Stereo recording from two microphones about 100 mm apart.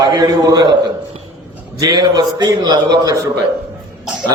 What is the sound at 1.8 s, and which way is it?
A man's voice, 40° right (ahead or behind).